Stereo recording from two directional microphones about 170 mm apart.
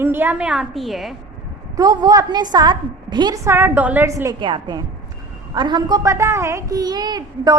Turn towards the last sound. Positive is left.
turn(degrees=-25)  # may be behind; listen again after turning